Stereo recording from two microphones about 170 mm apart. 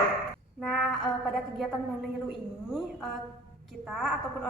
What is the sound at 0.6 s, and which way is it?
Female singing, centre (ahead or behind).